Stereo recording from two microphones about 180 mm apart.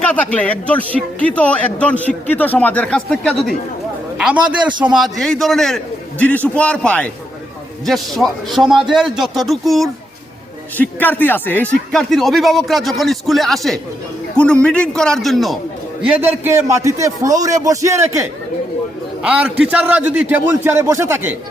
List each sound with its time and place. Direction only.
0.0 s a man's voice: 5° left (ahead or behind)
4.8 s a man's voice: 5° right (ahead or behind)